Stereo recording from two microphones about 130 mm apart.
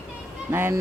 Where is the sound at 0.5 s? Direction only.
20° right (ahead or behind).